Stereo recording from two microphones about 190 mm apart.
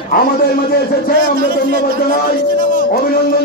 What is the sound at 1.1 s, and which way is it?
Speech, 50° right (ahead or behind).